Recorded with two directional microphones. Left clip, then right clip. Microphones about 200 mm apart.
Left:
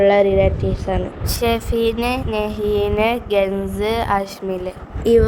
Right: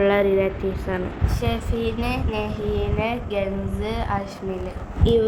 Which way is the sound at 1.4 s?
55° left (ahead or behind).